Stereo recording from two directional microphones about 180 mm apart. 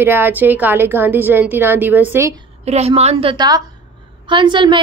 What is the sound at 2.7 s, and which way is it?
A woman's voice, 35° right (ahead or behind).